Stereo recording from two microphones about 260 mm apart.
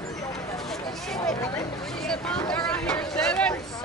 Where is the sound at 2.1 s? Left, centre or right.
Centre.